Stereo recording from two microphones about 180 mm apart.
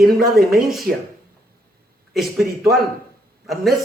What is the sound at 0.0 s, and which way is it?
Speech, 55° right (ahead or behind).